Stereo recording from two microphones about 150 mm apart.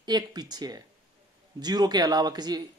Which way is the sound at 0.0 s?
25° right (ahead or behind).